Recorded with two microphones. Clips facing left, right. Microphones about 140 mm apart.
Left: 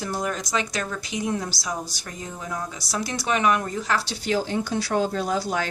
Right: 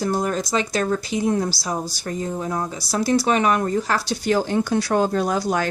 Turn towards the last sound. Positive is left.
turn(degrees=-50)  # may be behind; listen again after turning